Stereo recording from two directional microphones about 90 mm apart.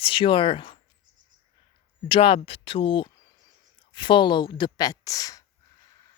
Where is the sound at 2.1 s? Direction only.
90° left; by 5.4 s 40° left (ahead or behind).